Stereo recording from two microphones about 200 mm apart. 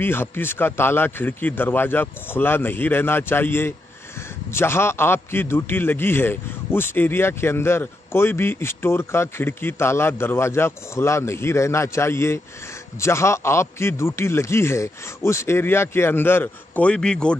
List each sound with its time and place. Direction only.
0.0 s a man's voice: 10° left (ahead or behind)